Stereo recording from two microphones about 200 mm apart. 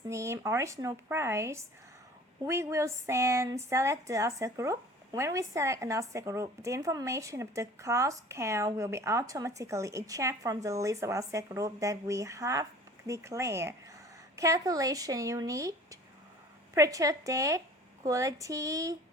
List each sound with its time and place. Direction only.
0.1 s speech: 15° right (ahead or behind)